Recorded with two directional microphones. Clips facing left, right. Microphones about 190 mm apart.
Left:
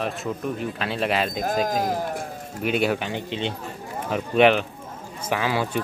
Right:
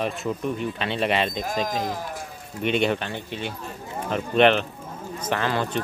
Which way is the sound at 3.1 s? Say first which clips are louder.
Left 4 dB; 20° left (ahead or behind).